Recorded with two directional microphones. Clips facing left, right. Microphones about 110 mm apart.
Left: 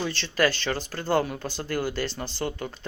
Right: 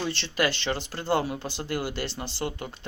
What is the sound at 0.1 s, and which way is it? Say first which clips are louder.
Speech: left 2 dB; 20° right (ahead or behind).